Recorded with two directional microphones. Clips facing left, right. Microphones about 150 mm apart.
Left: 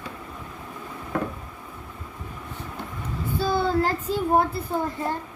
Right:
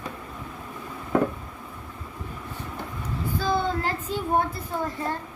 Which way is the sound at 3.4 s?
35° left (ahead or behind).